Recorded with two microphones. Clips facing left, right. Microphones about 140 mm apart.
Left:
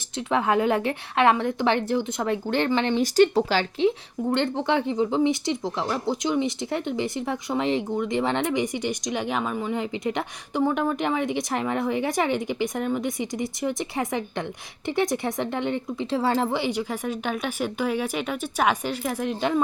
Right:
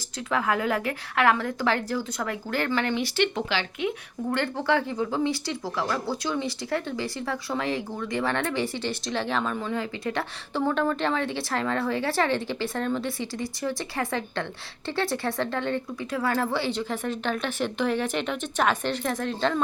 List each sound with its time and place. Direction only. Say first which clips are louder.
0.3 s speech: left 4 dB; 25° left (ahead or behind)
2.9 s speech: left 7 dB; 35° left (ahead or behind)
3.8 s speech: left 6 dB; 30° left (ahead or behind); by 19.6 s 15° left (ahead or behind)